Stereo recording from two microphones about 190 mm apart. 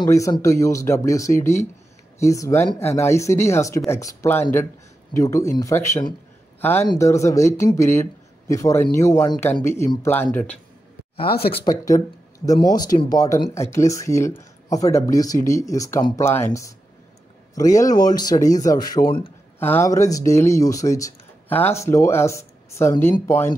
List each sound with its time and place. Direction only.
0.0 s speech: 20° left (ahead or behind)
11.2 s speech: 55° left (ahead or behind)
11.5 s speech: 20° left (ahead or behind)